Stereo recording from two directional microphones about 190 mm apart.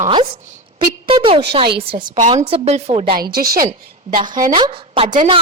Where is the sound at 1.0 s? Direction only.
30° right (ahead or behind).